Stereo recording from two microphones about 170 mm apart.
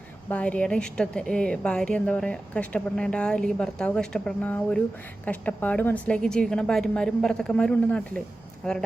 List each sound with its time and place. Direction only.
0.3 s a woman's voice: 10° left (ahead or behind)